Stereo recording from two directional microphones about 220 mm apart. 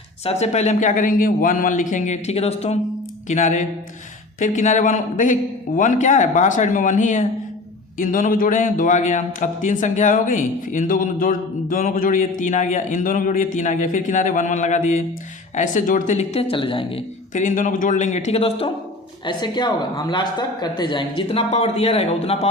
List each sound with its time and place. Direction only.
0.3 s a man's voice: 30° left (ahead or behind)